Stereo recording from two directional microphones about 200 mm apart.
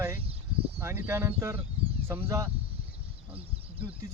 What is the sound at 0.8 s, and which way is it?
Speech, 10° right (ahead or behind).